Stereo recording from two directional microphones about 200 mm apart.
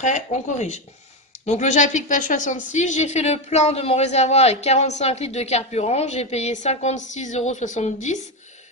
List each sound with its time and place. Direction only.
0.0 s a woman's voice: 35° left (ahead or behind)